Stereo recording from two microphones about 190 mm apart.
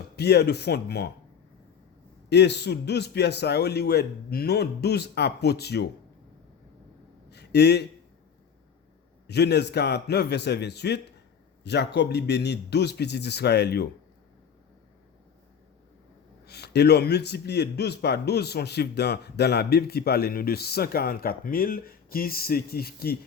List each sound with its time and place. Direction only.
0.2 s a man's voice: 60° left (ahead or behind)
2.3 s a man's voice: 60° left (ahead or behind)
7.3 s a sound: 60° left (ahead or behind)
9.2 s a man's voice: 60° left (ahead or behind)
16.5 s a man's voice: 60° left (ahead or behind)